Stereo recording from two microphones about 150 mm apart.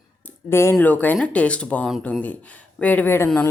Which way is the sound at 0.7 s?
10° left (ahead or behind).